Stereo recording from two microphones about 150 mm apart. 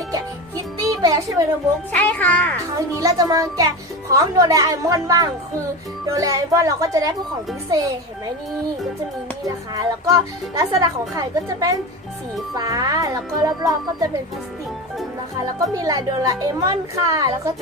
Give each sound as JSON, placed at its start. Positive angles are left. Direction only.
{"t": 0.1, "sound": "music", "side_deg": -25}
{"t": 1.9, "sound": "a child's voice", "side_deg": 10}
{"t": 3.0, "sound": "speech", "side_deg": -25}
{"t": 9.4, "sound": "speech", "side_deg": -20}
{"t": 15.6, "sound": "speech", "side_deg": -25}